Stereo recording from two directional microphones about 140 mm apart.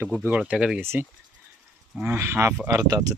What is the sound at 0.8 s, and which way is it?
Speech, 15° right (ahead or behind).